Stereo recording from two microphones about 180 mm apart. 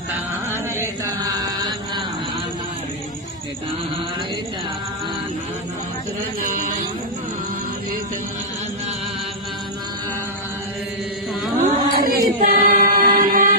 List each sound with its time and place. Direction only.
0.5 s chant: 15° right (ahead or behind)
6.4 s a sound: 50° right (ahead or behind)
11.6 s choir: 50° right (ahead or behind)